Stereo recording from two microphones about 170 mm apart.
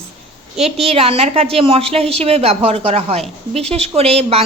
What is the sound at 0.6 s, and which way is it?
Speech, 35° right (ahead or behind).